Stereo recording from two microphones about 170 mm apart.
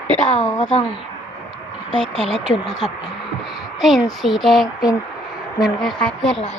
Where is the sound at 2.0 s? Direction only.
Centre (ahead or behind).